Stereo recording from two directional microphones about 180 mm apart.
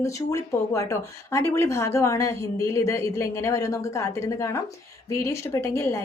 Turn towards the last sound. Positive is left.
turn(degrees=15)  # may be behind; listen again after turning